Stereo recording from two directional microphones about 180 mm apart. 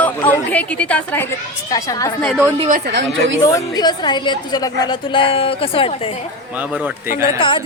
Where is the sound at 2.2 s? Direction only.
Centre (ahead or behind).